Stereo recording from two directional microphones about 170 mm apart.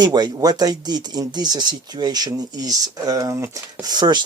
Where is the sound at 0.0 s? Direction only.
25° right (ahead or behind).